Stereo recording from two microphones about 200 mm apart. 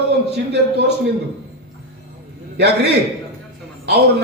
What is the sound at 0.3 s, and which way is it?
Speech, 55° right (ahead or behind).